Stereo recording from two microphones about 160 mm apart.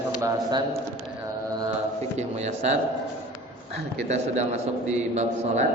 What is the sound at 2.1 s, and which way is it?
Speech, 45° right (ahead or behind).